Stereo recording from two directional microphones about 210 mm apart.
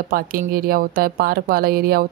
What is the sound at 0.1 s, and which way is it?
Speech, 45° right (ahead or behind).